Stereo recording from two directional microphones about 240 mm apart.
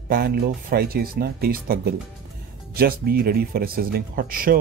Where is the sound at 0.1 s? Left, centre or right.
Right.